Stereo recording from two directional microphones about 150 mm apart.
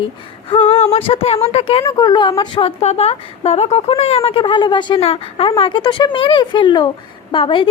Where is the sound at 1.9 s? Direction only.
25° left (ahead or behind).